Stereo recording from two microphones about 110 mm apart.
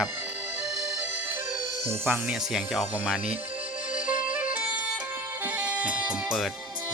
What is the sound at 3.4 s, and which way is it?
Music, 15° right (ahead or behind).